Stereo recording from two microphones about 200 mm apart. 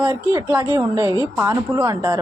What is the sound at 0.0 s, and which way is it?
A woman's voice, 10° right (ahead or behind).